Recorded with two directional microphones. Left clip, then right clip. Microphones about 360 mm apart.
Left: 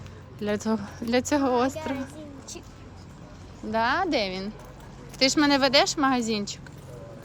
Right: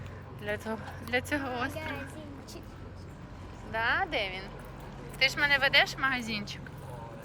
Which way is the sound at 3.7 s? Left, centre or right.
Centre.